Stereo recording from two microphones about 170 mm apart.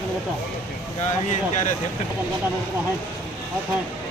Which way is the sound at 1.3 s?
45° left (ahead or behind).